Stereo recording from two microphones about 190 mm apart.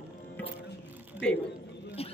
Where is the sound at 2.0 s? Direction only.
30° left (ahead or behind).